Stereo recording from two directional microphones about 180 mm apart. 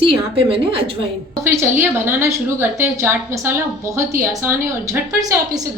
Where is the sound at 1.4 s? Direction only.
15° right (ahead or behind).